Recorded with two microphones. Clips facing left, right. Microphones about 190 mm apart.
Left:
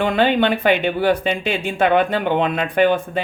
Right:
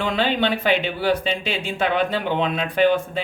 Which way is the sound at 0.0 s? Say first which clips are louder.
Left 5 dB; 55° left (ahead or behind).